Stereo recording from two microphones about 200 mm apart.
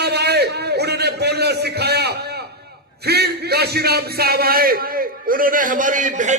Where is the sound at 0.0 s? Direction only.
55° right (ahead or behind).